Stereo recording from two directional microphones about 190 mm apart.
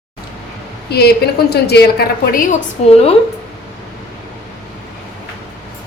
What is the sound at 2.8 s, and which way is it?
Speech, 30° left (ahead or behind).